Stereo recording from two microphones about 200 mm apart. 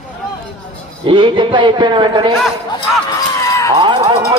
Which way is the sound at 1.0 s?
25° right (ahead or behind).